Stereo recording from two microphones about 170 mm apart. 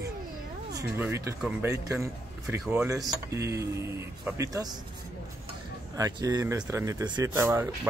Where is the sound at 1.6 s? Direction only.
20° right (ahead or behind).